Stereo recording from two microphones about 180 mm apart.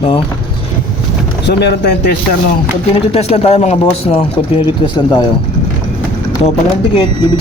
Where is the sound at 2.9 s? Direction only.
35° left (ahead or behind).